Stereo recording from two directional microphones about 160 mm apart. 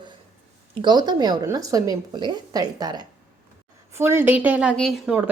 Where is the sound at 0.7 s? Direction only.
30° right (ahead or behind).